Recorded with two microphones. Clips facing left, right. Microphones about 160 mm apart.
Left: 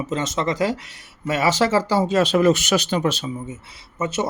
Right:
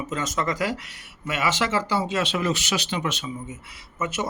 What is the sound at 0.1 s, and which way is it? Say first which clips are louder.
Speech: left 3 dB; 25° left (ahead or behind).